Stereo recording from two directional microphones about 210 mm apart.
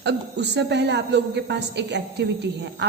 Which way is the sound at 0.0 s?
55° right (ahead or behind).